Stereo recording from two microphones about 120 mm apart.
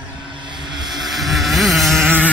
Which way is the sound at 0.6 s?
40° right (ahead or behind).